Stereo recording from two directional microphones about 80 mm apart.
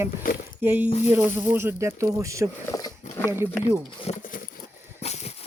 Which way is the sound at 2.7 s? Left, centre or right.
Left.